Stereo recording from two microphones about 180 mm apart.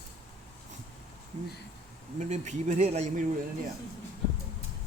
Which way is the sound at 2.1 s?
40° right (ahead or behind).